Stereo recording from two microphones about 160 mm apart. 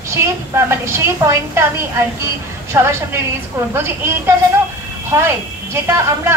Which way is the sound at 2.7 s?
15° right (ahead or behind).